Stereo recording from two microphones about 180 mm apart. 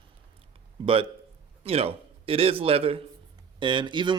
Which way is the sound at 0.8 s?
30° right (ahead or behind).